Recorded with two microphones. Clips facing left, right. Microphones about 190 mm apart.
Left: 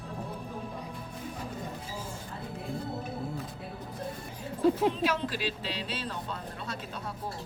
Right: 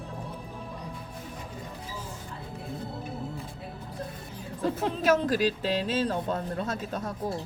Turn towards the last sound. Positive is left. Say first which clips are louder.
# right 7 dB
turn(degrees=-45)  # may be behind; listen again after turning